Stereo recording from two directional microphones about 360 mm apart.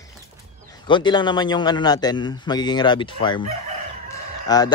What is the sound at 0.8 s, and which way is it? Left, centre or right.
Speech, centre.